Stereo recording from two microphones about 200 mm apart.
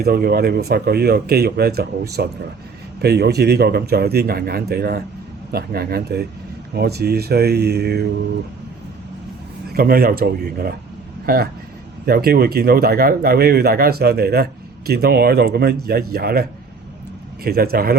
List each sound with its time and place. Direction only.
0.0 s speech: 50° right (ahead or behind)
9.7 s speech: 50° right (ahead or behind)